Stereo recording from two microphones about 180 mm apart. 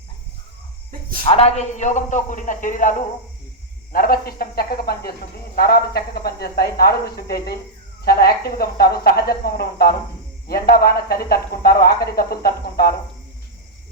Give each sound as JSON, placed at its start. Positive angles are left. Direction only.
{"t": 1.2, "sound": "a man's voice", "side_deg": 35}
{"t": 3.9, "sound": "speech", "side_deg": 55}